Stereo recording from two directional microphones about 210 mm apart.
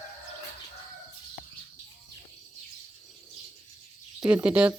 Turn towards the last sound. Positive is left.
turn(degrees=-5)  # may be behind; listen again after turning